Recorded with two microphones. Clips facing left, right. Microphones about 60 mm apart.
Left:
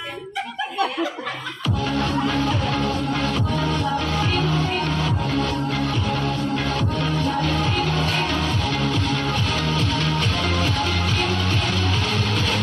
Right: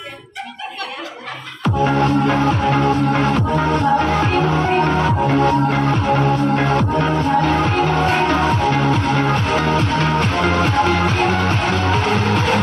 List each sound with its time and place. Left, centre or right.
1.8 s music: right